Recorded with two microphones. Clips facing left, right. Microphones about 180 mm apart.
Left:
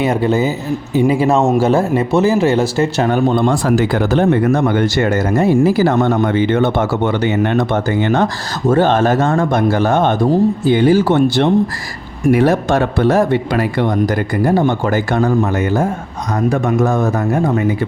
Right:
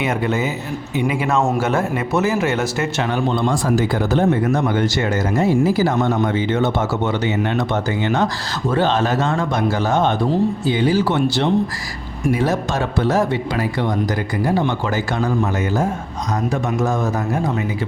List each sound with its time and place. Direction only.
0.0 s speech: 35° left (ahead or behind)
3.1 s speech: 50° left (ahead or behind)
12.3 s speech: 60° left (ahead or behind)
16.5 s speech: 60° left (ahead or behind)